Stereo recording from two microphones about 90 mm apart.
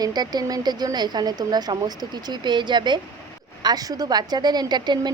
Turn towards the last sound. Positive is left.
turn(degrees=-50)  # may be behind; listen again after turning